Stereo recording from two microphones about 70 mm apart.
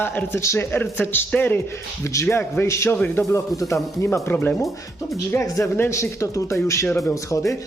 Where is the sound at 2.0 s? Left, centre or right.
Left.